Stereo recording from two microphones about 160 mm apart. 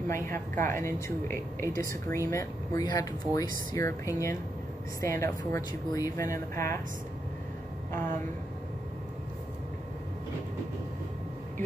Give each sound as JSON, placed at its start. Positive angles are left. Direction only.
{"t": 0.1, "sound": "a woman's voice", "side_deg": 15}